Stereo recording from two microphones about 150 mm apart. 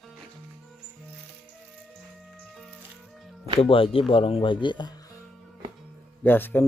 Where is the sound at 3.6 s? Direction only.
40° left (ahead or behind).